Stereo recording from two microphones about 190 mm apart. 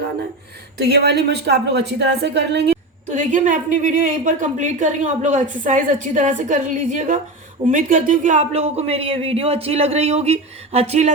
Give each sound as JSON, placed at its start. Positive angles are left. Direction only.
{"t": 0.8, "sound": "a woman's voice", "side_deg": -60}
{"t": 3.1, "sound": "a woman's voice", "side_deg": -40}